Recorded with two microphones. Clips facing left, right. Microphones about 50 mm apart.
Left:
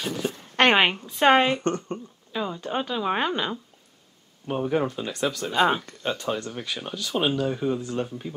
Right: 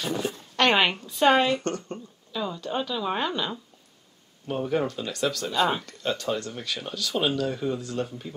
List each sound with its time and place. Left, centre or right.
0.6 s a sound: left
0.9 s speech: left
4.5 s speech: centre